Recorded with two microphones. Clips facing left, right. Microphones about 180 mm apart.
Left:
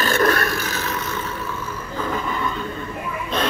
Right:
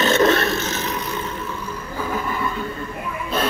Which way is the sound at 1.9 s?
5° right (ahead or behind).